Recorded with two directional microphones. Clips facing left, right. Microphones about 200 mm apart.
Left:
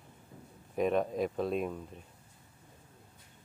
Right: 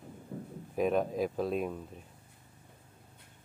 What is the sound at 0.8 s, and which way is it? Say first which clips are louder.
Speech: even; centre (ahead or behind).